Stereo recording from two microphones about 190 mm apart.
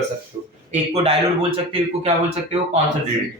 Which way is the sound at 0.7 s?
30° right (ahead or behind).